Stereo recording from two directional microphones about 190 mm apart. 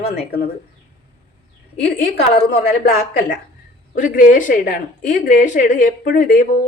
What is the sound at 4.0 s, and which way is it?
A woman's voice, 45° left (ahead or behind).